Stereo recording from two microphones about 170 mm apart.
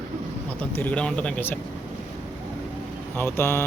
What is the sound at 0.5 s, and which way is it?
Speech, 10° left (ahead or behind).